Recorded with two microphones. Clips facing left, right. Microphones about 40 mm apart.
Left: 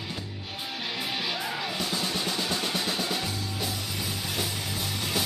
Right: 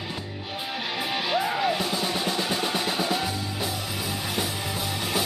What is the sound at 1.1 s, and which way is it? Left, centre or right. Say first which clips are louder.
Music: right 8 dB; centre.